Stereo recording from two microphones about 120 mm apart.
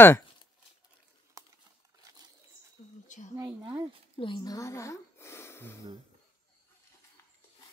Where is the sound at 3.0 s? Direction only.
90° left.